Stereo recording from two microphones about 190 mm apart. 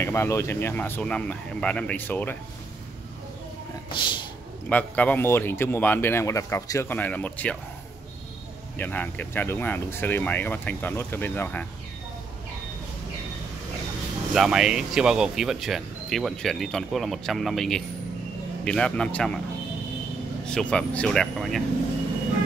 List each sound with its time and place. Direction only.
0.0 s speech: 15° left (ahead or behind)
3.9 s speech: 25° left (ahead or behind)
4.6 s speech: 5° left (ahead or behind)
8.7 s speech: 10° left (ahead or behind)
14.3 s speech: centre (ahead or behind)
20.4 s speech: 5° left (ahead or behind)